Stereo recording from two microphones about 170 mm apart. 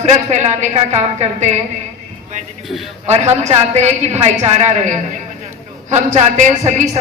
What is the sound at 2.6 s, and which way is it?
Speech, centre (ahead or behind).